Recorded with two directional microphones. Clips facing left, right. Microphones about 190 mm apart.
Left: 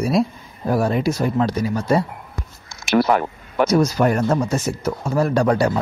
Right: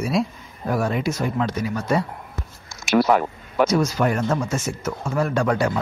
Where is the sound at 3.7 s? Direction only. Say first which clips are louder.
Left 3 dB; 40° left (ahead or behind).